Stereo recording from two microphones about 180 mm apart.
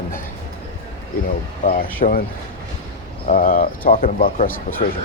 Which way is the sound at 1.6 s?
55° left (ahead or behind).